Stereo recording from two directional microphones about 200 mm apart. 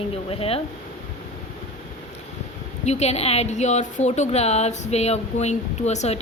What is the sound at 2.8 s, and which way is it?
A woman's voice, 35° left (ahead or behind).